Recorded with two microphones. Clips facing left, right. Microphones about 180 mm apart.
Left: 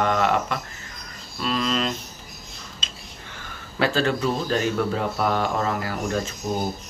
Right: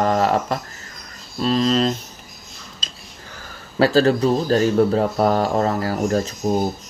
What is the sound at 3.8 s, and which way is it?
Speech, 35° right (ahead or behind).